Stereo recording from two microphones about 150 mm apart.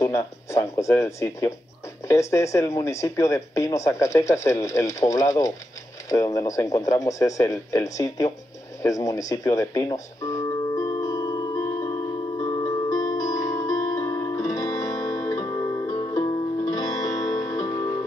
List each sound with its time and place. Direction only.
0.0 s speech: 20° left (ahead or behind)
8.8 s music: 20° left (ahead or behind)